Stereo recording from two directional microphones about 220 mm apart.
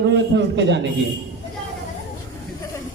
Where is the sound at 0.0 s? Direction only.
50° right (ahead or behind).